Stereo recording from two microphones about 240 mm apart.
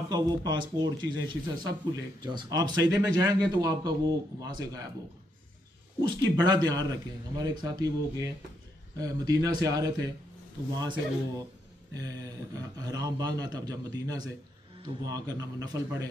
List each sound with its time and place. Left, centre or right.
0.1 s a man's voice: centre
5.9 s a man's voice: centre
11.9 s a sound: centre
12.7 s a man's voice: centre